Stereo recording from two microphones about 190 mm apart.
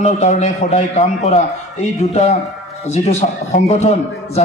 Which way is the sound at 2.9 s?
35° left (ahead or behind).